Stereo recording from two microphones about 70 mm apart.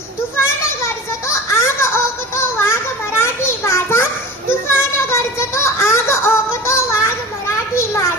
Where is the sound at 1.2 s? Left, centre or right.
Left.